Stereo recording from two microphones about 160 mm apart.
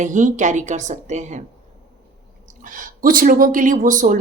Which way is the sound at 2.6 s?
55° right (ahead or behind).